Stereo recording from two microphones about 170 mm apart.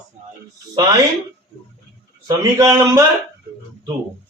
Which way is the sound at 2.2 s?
20° right (ahead or behind).